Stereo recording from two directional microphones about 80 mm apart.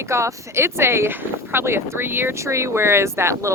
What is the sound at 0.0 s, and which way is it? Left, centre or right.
Speech, right.